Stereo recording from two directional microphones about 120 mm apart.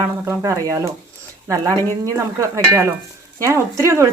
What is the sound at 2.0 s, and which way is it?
Speech, 25° right (ahead or behind).